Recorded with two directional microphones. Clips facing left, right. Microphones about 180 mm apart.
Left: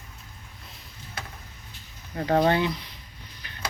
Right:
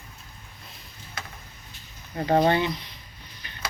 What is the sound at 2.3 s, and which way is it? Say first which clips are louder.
Speech: right 1 dB; 15° right (ahead or behind).